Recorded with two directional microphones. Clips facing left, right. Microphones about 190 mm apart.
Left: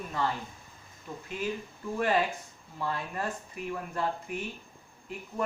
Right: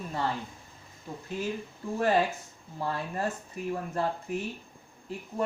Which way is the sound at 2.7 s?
35° right (ahead or behind).